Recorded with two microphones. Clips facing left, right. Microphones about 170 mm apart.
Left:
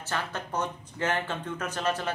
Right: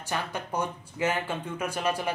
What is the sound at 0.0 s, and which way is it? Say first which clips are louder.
Speech: right 1 dB; 15° right (ahead or behind).